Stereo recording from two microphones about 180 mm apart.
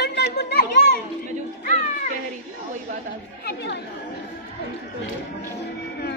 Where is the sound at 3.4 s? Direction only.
70° left (ahead or behind).